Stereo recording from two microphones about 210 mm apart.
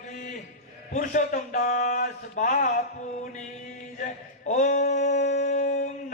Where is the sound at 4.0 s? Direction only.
35° left (ahead or behind).